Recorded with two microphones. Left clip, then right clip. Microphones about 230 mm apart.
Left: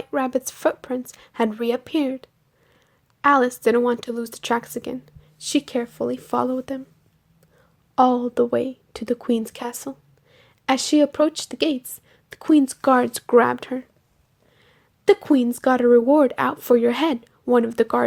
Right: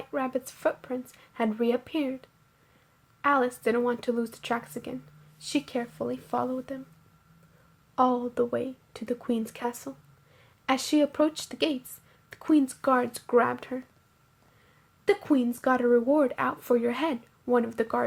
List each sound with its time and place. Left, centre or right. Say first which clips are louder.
0.1 s speech: left 7 dB; left
7.9 s speech: left 7 dB; left
15.0 s speech: left 8 dB; left